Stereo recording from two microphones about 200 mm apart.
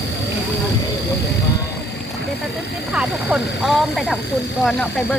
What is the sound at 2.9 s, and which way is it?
Speech, centre (ahead or behind).